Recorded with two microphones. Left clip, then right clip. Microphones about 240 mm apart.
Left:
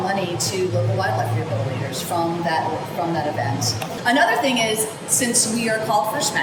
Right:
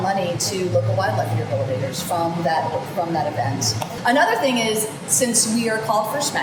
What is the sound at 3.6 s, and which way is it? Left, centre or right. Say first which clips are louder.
A woman's voice: right 1 dB; centre.